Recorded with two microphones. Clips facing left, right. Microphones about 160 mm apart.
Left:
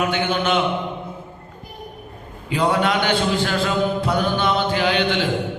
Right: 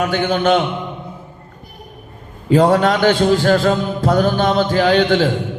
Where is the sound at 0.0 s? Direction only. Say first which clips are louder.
Right 4 dB; 40° right (ahead or behind).